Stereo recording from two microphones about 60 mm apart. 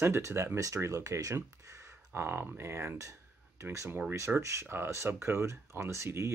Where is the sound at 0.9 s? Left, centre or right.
Right.